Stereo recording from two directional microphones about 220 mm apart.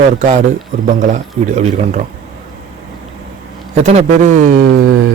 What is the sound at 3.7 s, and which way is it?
Speech, 30° right (ahead or behind).